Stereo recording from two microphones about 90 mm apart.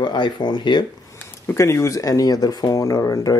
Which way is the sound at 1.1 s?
30° left (ahead or behind).